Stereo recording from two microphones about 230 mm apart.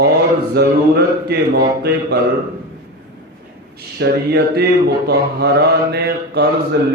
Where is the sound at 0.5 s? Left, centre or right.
Right.